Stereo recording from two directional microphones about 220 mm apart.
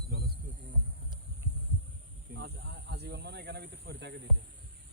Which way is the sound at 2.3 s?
50° right (ahead or behind).